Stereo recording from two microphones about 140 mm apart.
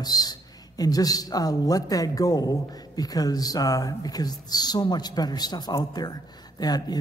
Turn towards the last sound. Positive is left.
turn(degrees=30)  # may be behind; listen again after turning